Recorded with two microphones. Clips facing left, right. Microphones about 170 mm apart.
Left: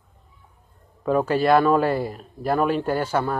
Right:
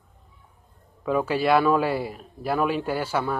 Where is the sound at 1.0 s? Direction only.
40° left (ahead or behind).